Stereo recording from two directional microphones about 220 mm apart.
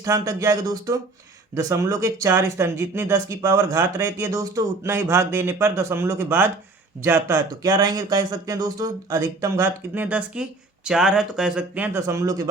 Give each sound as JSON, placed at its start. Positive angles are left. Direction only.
{"t": 0.0, "sound": "speech", "side_deg": -15}